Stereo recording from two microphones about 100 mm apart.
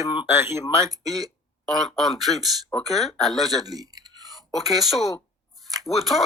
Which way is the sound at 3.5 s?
40° right (ahead or behind).